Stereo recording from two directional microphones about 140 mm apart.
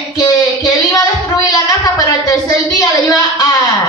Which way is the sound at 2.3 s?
25° left (ahead or behind).